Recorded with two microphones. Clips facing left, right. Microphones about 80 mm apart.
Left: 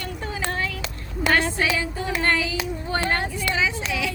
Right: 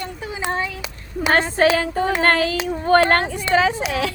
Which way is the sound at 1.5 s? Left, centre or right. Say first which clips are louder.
Right 8 dB; right.